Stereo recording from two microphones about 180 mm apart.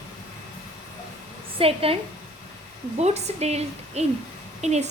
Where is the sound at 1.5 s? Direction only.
30° right (ahead or behind).